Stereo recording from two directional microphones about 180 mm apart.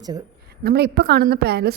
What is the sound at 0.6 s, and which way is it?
Speech, 60° right (ahead or behind).